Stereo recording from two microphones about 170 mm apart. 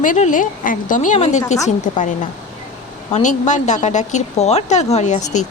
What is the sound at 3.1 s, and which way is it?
Speech, 40° left (ahead or behind).